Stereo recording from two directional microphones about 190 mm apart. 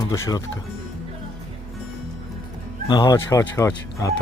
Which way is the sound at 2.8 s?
20° left (ahead or behind).